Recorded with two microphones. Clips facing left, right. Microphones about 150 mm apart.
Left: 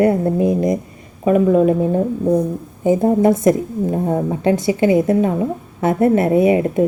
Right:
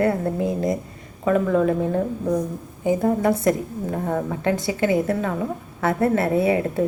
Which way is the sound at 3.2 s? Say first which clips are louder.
Left 6 dB; 20° left (ahead or behind).